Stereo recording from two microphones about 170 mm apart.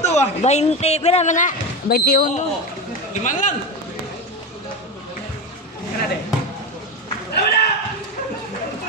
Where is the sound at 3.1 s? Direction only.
45° left (ahead or behind).